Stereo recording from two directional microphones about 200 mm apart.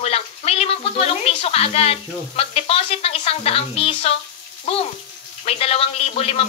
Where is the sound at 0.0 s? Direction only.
30° left (ahead or behind).